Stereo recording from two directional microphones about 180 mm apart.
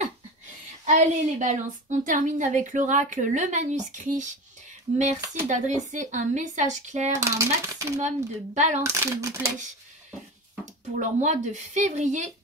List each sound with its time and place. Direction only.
0.9 s a woman's voice: 40° right (ahead or behind)
7.1 s speech: 15° right (ahead or behind)
8.5 s speech: 40° right (ahead or behind)
8.8 s speech: 15° right (ahead or behind)
10.6 s speech: 45° right (ahead or behind)